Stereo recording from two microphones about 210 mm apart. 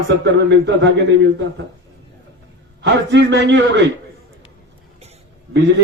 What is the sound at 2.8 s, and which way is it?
Speech, 55° right (ahead or behind).